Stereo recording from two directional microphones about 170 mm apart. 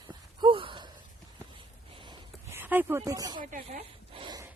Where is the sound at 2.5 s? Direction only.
15° right (ahead or behind).